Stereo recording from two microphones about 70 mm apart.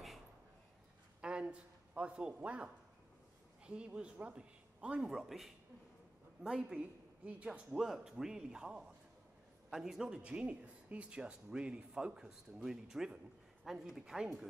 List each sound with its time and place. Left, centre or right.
1.2 s a sound: centre
3.6 s speech: centre
5.1 s a woman's voice: centre